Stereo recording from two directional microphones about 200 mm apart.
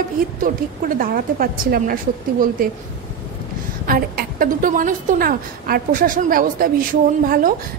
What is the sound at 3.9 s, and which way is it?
A woman's voice, 45° right (ahead or behind).